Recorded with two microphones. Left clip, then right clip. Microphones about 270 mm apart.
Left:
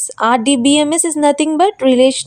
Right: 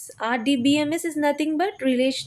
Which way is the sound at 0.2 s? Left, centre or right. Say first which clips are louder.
Left 10 dB; left.